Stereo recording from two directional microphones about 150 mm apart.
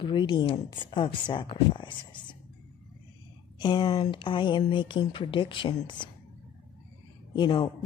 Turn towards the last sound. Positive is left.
turn(degrees=30)  # may be behind; listen again after turning